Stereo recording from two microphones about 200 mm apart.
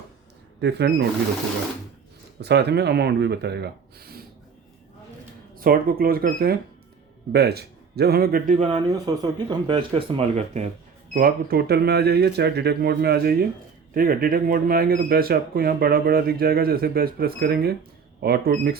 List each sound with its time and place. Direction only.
0.6 s speech: 55° right (ahead or behind)
2.4 s speech: 55° right (ahead or behind)
5.5 s speech: 45° right (ahead or behind)
8.6 s speech: 20° right (ahead or behind)
11.1 s speech: 45° right (ahead or behind)